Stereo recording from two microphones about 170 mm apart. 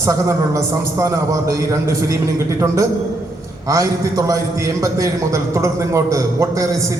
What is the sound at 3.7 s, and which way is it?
A man's voice, 20° right (ahead or behind).